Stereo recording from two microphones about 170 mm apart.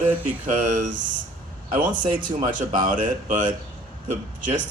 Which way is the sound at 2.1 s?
50° right (ahead or behind).